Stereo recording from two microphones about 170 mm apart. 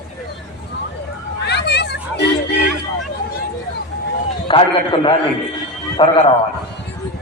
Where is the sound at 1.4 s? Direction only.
80° left.